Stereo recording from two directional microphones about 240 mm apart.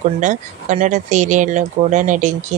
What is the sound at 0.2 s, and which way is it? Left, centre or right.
Speech, right.